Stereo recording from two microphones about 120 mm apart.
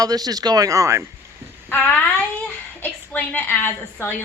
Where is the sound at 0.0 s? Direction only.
30° right (ahead or behind).